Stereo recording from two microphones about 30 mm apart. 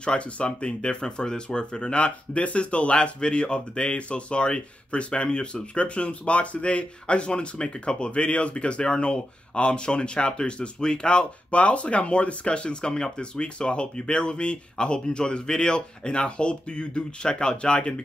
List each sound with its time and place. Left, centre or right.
0.0 s speech: left
11.5 s speech: left